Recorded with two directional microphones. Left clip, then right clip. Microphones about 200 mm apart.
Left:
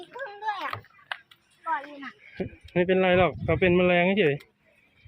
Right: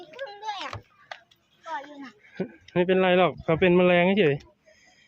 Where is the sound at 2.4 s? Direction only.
10° right (ahead or behind).